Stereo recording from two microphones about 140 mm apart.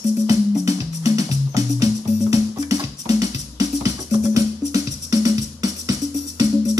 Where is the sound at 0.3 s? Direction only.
25° right (ahead or behind).